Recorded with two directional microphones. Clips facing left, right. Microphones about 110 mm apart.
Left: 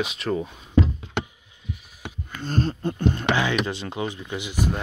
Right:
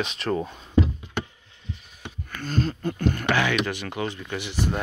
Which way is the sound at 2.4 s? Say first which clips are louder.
Left 1 dB; 35° left (ahead or behind).